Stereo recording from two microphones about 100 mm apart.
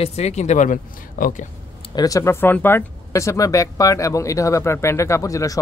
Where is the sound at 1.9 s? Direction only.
35° left (ahead or behind).